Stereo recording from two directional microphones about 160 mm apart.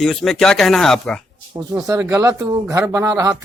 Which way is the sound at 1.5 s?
25° right (ahead or behind).